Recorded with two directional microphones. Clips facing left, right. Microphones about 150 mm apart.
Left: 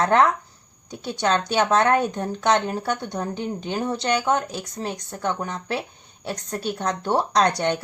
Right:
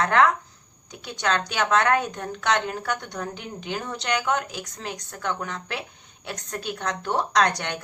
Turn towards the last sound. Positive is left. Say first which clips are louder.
# left 3 dB
turn(degrees=30)  # may be behind; listen again after turning